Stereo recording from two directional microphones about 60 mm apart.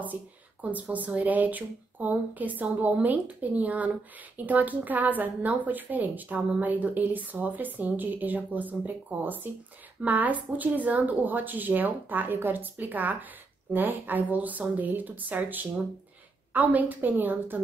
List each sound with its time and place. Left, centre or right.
0.0 s a woman's voice: right